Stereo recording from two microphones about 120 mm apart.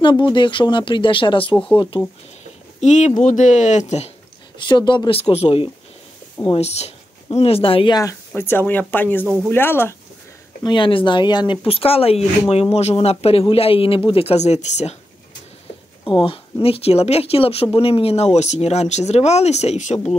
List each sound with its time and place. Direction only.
0.0 s speech: 40° left (ahead or behind)
2.8 s speech: 90° left
4.6 s speech: 40° left (ahead or behind)
7.9 s speech: 30° left (ahead or behind)
8.4 s speech: 20° left (ahead or behind)
10.6 s speech: 40° left (ahead or behind); by 15.0 s 65° left (ahead or behind)
16.1 s speech: 45° left (ahead or behind); by 20.0 s 75° left (ahead or behind)